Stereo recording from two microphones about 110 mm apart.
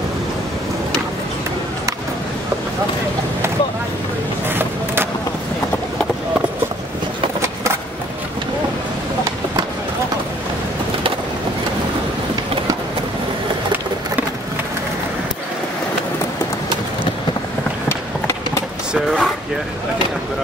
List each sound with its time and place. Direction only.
4.5 s vehicle: 20° right (ahead or behind)
17.8 s run: 25° left (ahead or behind)
18.9 s a sound: centre (ahead or behind)